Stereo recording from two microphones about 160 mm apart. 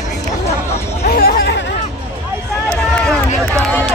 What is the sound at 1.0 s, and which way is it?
Chatter, 70° left (ahead or behind).